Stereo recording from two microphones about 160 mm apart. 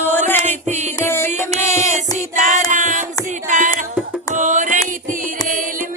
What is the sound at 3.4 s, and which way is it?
Music, 50° right (ahead or behind).